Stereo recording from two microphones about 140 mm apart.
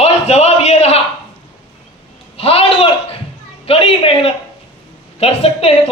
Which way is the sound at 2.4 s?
45° left (ahead or behind).